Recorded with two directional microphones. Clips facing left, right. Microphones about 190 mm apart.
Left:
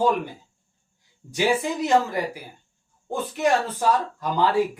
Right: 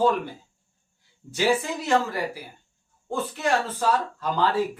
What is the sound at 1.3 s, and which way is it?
Speech, 15° left (ahead or behind).